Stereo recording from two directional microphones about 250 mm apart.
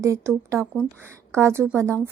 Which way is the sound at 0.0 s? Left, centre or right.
Centre.